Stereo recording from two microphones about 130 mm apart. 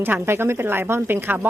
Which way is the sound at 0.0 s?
15° right (ahead or behind).